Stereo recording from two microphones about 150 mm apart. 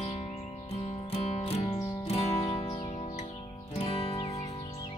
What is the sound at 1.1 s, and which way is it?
Music, 40° left (ahead or behind).